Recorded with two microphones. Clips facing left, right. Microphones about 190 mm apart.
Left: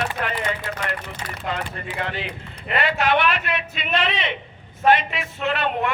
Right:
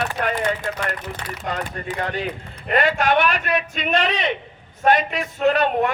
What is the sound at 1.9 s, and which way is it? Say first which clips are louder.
A man's voice: right 4 dB; 45° right (ahead or behind).